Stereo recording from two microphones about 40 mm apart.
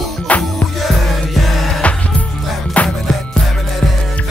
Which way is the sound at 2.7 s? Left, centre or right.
Left.